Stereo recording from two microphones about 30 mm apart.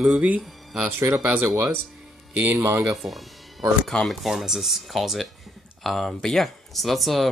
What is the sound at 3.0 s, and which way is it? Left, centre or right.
Music, centre.